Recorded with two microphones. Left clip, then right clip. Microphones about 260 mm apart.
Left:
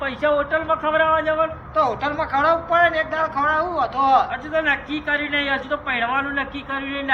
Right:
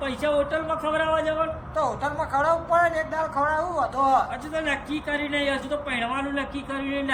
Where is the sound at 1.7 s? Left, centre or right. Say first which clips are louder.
Left 6 dB; right.